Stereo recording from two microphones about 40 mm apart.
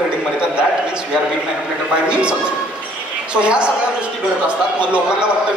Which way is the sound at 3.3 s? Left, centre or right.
Right.